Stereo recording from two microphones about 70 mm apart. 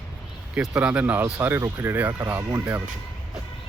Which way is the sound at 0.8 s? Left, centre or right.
Centre.